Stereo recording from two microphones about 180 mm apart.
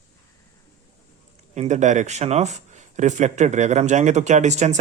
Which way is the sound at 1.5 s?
40° right (ahead or behind).